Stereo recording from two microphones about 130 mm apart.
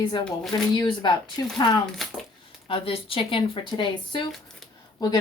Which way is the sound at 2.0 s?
Centre (ahead or behind).